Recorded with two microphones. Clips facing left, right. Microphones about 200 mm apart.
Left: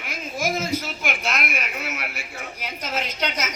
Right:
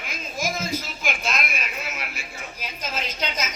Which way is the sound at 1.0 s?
65° left (ahead or behind).